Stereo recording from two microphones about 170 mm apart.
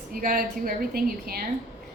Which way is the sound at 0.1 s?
55° right (ahead or behind).